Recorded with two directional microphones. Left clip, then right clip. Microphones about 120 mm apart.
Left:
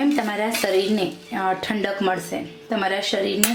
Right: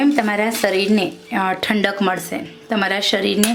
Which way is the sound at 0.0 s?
35° right (ahead or behind).